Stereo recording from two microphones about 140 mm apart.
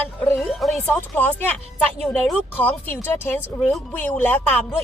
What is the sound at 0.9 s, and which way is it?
Speech, 15° left (ahead or behind).